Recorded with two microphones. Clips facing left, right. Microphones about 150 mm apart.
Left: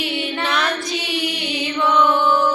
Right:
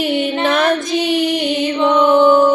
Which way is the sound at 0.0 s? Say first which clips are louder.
Right 7 dB; 45° right (ahead or behind).